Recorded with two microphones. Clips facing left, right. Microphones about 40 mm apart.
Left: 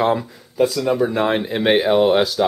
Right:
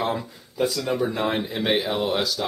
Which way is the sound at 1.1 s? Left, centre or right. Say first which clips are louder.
Left 6 dB; left.